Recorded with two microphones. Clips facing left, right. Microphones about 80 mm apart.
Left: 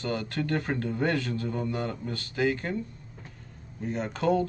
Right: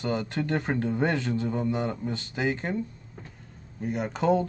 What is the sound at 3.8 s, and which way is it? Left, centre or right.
Speech, centre.